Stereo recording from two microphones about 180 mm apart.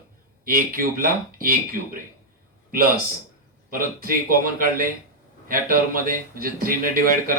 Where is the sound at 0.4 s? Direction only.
50° right (ahead or behind).